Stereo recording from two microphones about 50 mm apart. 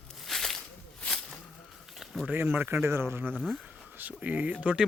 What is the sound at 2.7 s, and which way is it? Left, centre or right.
Speech, right.